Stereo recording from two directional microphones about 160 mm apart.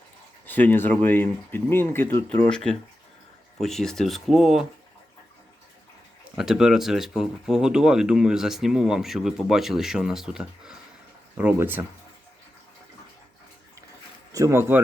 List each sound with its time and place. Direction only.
0.4 s speech: 10° left (ahead or behind)
6.3 s speech: 5° right (ahead or behind)
14.3 s speech: 20° right (ahead or behind)